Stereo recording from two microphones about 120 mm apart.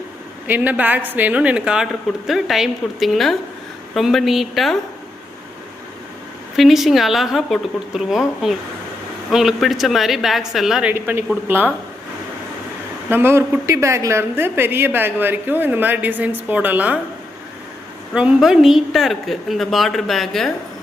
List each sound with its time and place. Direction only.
0.4 s a woman's voice: 15° right (ahead or behind); by 4.8 s centre (ahead or behind)
6.6 s a woman's voice: centre (ahead or behind)
10.9 s a man's voice: 20° right (ahead or behind)
13.1 s a woman's voice: 20° right (ahead or behind)
18.1 s a woman's voice: 10° right (ahead or behind)